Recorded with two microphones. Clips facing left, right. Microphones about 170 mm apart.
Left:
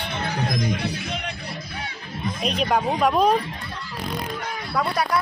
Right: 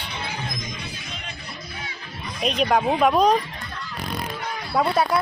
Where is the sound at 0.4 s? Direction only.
65° left (ahead or behind).